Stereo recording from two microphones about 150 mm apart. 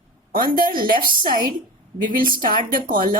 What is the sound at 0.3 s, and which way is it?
Speech, 75° right (ahead or behind).